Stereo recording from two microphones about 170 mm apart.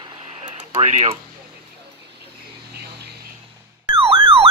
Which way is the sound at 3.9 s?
30° right (ahead or behind).